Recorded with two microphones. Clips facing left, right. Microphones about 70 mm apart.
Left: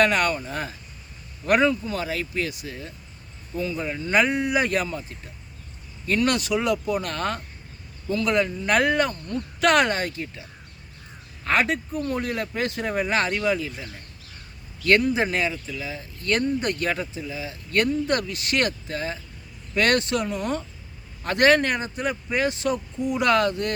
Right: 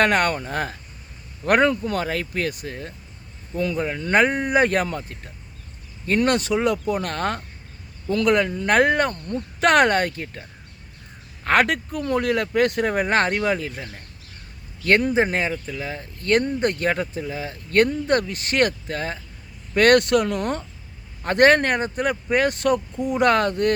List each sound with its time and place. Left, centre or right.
0.0 s speech: right
6.1 s speech: right
11.4 s speech: right
14.8 s speech: right